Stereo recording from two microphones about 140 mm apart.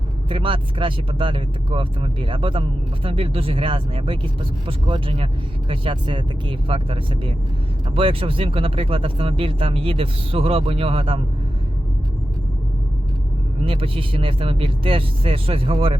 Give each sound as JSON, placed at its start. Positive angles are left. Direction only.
{"t": 0.3, "sound": "speech", "side_deg": -40}
{"t": 13.7, "sound": "speech", "side_deg": -40}